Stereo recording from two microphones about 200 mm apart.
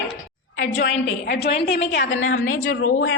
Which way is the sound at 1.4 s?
55° left (ahead or behind).